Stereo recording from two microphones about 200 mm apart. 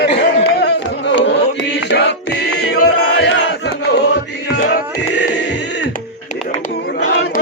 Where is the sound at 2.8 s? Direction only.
55° left (ahead or behind).